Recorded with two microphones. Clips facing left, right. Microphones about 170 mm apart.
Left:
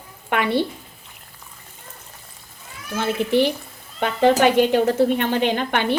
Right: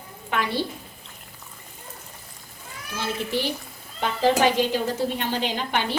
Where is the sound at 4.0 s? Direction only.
60° left (ahead or behind).